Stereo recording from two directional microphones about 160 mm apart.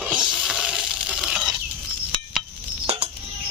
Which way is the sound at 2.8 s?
45° right (ahead or behind).